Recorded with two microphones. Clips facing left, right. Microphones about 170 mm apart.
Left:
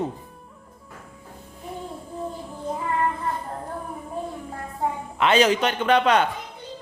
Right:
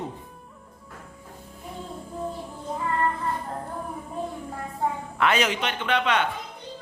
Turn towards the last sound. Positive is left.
turn(degrees=40)  # may be behind; listen again after turning